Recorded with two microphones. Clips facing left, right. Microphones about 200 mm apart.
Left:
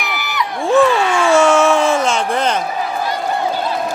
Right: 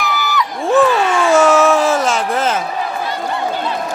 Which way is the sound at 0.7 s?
Centre (ahead or behind).